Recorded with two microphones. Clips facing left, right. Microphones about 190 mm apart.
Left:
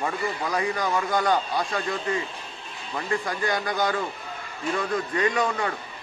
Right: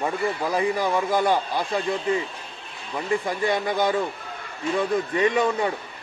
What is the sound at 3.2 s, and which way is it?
Speech, 25° right (ahead or behind).